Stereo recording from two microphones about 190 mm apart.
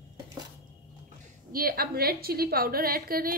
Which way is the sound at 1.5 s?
50° right (ahead or behind).